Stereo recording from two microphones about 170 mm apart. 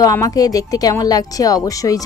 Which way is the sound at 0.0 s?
20° left (ahead or behind).